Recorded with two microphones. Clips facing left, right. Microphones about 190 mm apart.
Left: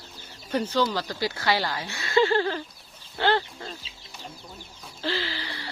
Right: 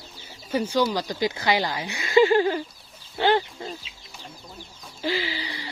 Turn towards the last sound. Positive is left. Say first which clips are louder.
# right 3 dB
turn(degrees=-15)  # may be behind; listen again after turning